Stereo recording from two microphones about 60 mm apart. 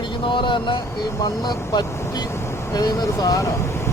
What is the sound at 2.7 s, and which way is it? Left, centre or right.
Speech, left.